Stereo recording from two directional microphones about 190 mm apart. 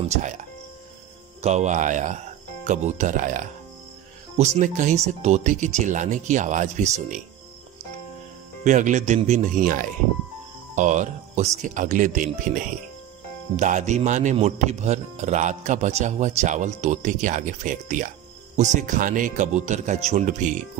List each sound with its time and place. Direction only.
0.1 s speech: 40° right (ahead or behind)
1.4 s speech: 35° right (ahead or behind)
8.6 s speech: 40° right (ahead or behind)